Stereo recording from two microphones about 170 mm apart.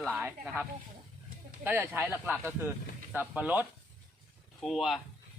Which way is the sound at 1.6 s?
10° right (ahead or behind).